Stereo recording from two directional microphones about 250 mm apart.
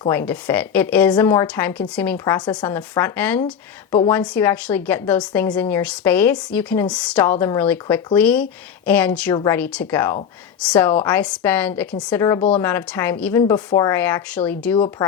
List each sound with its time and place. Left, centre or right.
0.1 s a woman's voice: centre